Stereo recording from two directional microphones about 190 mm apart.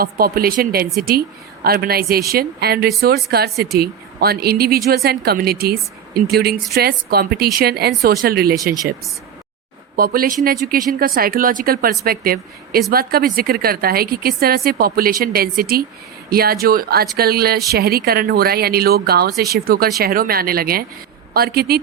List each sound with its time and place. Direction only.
0.0 s speech: 50° right (ahead or behind)
9.9 s speech: 50° right (ahead or behind)